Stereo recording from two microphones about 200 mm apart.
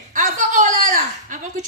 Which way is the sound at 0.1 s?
40° right (ahead or behind).